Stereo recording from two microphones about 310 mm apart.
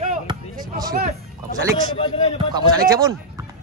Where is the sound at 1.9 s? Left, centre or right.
Centre.